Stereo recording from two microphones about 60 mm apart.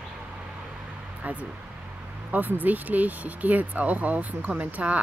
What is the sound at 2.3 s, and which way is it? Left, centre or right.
Speech, right.